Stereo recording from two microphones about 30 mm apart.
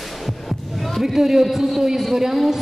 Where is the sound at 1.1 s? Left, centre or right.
Centre.